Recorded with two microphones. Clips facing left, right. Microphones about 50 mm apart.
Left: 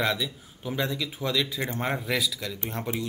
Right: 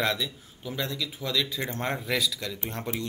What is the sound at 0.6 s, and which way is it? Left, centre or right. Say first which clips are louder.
Speech: left 3 dB; centre.